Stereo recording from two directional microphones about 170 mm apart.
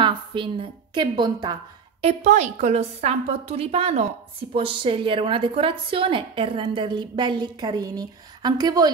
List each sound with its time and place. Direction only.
0.0 s a woman's voice: 30° right (ahead or behind)
2.0 s a woman's voice: 40° right (ahead or behind); by 8.9 s 25° right (ahead or behind)